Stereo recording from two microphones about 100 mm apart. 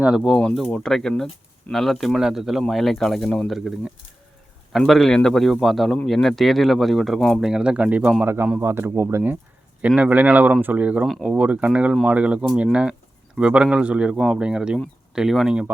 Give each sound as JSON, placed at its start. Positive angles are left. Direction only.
{"t": 0.2, "sound": "speech", "side_deg": 5}
{"t": 4.9, "sound": "speech", "side_deg": 5}
{"t": 9.8, "sound": "speech", "side_deg": -15}
{"t": 11.0, "sound": "speech", "side_deg": 0}
{"t": 11.3, "sound": "speech", "side_deg": -15}